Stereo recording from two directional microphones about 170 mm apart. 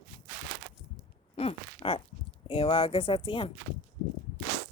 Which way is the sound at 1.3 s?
35° left (ahead or behind).